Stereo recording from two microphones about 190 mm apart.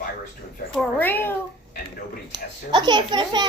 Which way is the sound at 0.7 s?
10° left (ahead or behind).